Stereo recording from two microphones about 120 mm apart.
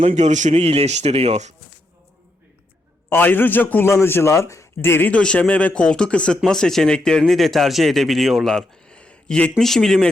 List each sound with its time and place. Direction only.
0.0 s speech: 70° right (ahead or behind)
3.1 s a man's voice: 15° left (ahead or behind)